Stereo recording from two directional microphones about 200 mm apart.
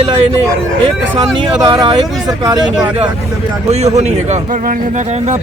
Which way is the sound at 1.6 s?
20° right (ahead or behind).